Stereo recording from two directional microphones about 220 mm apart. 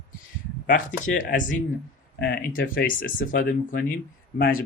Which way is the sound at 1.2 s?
35° left (ahead or behind).